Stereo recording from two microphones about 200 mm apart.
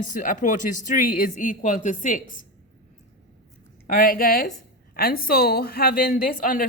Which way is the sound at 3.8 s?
45° left (ahead or behind).